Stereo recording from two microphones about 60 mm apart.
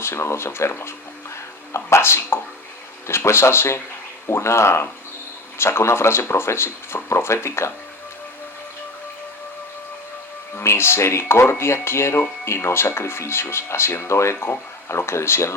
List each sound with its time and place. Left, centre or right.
0.0 s speech: left
10.5 s speech: left